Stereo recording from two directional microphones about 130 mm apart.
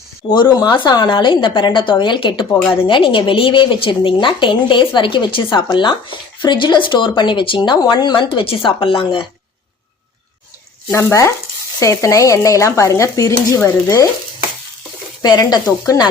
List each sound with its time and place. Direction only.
0.3 s a woman's voice: 35° left (ahead or behind)
10.9 s speech: 20° left (ahead or behind)
15.2 s a woman's voice: 30° left (ahead or behind)